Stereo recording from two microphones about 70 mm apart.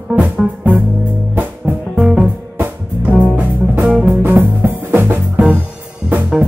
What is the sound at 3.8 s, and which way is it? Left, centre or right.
Music, centre.